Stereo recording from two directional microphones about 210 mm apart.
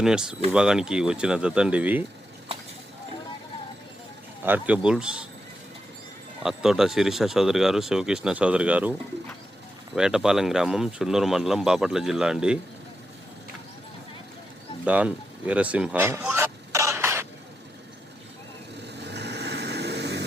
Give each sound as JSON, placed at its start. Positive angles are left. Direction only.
{"t": 0.0, "sound": "speech", "side_deg": -5}
{"t": 4.4, "sound": "speech", "side_deg": -5}
{"t": 6.4, "sound": "speech", "side_deg": 0}
{"t": 14.8, "sound": "speech", "side_deg": -5}
{"t": 16.3, "sound": "throat clearing", "side_deg": -15}
{"t": 19.0, "sound": "vehicle", "side_deg": -55}